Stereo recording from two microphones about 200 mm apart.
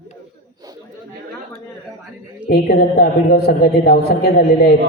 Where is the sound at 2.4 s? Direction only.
55° left (ahead or behind).